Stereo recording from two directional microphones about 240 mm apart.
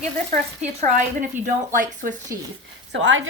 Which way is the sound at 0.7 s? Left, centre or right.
Right.